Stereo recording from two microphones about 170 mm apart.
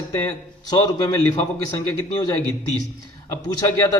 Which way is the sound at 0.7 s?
30° left (ahead or behind).